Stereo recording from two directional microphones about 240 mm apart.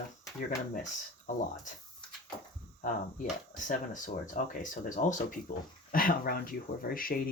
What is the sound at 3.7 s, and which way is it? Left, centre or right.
Speech, left.